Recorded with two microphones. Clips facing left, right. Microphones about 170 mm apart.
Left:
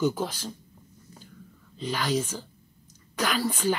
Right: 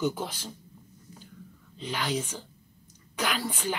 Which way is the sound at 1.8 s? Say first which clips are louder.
Left 3 dB; 40° left (ahead or behind).